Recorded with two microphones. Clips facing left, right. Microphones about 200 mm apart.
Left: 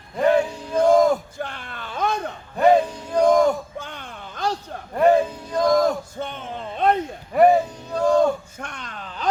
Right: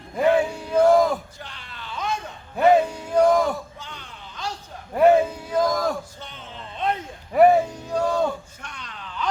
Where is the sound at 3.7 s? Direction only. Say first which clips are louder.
Left 6 dB; 55° left (ahead or behind).